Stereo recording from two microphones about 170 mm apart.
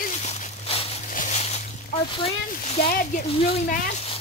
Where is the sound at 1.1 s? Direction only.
45° left (ahead or behind).